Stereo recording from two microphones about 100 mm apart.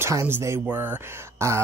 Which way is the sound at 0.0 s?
25° right (ahead or behind).